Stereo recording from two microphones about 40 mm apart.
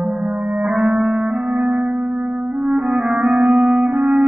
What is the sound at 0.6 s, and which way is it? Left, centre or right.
Music, centre.